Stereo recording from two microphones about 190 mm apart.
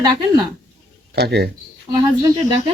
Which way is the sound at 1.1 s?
60° right (ahead or behind).